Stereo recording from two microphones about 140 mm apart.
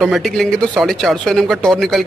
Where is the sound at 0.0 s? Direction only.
Centre (ahead or behind).